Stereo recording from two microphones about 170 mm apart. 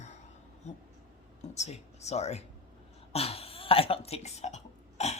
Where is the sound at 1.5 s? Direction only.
40° left (ahead or behind).